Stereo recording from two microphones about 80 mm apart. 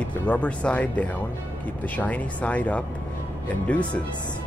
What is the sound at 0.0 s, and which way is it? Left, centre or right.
Speech, centre.